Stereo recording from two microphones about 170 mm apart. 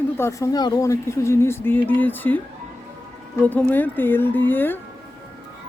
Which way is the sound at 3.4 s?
10° left (ahead or behind).